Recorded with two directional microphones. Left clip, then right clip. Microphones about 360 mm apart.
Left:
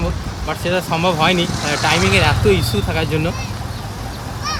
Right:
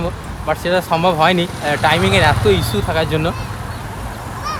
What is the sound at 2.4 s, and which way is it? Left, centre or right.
Speech, centre.